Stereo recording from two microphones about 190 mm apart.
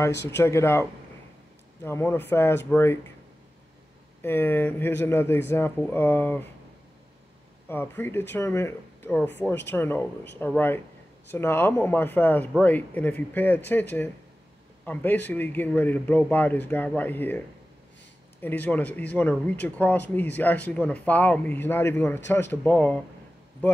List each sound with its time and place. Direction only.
0.1 s speech: 65° left (ahead or behind)
0.4 s speech: 15° left (ahead or behind)
4.2 s speech: 10° left (ahead or behind)
7.6 s speech: 10° left (ahead or behind)
18.4 s speech: 10° left (ahead or behind)